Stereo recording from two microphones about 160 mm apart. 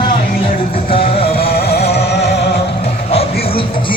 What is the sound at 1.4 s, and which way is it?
Music, 80° left.